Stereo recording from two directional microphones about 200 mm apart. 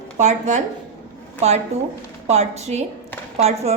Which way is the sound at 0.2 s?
35° right (ahead or behind).